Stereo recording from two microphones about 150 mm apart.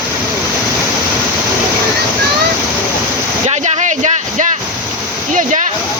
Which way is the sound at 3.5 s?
50° right (ahead or behind).